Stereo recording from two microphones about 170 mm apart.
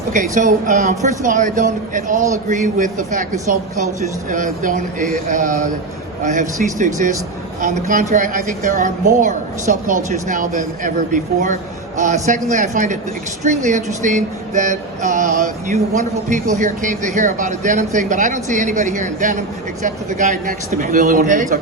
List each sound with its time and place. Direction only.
0.1 s a woman's voice: 50° right (ahead or behind)